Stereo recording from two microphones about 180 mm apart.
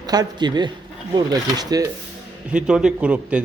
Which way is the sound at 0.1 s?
25° right (ahead or behind).